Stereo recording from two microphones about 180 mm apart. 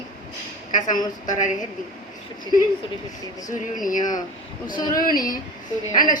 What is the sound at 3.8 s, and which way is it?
Speech, 45° left (ahead or behind).